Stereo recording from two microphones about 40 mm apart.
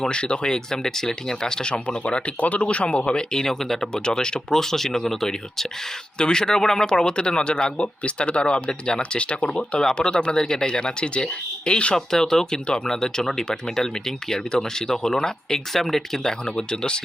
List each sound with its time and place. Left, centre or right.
0.0 s speech: left
1.7 s speech: left
3.4 s speech: centre
3.9 s speech: centre
11.9 s speech: centre
16.6 s speech: left